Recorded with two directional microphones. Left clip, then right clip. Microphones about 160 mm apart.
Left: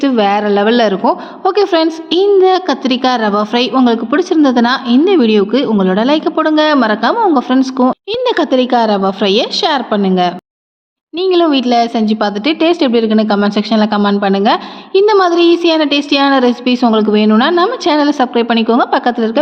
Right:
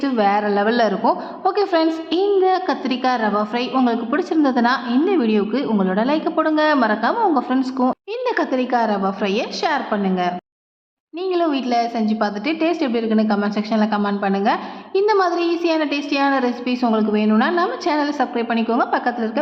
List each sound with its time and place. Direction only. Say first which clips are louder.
0.0 s a woman's voice: left 6 dB; 25° left (ahead or behind)